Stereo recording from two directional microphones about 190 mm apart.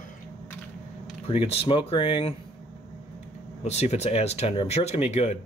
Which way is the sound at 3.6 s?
35° left (ahead or behind).